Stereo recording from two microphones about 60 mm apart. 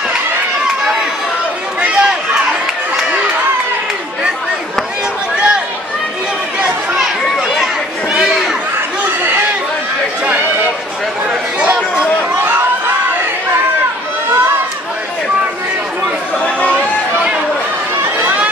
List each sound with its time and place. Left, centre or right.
1.8 s run: centre
7.0 s a sound: centre
12.4 s crowd: right
16.7 s chatter: centre